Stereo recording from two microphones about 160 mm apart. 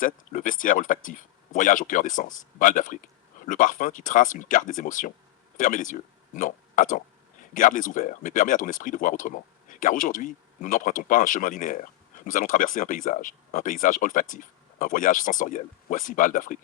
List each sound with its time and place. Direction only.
0.0 s speech: 55° left (ahead or behind)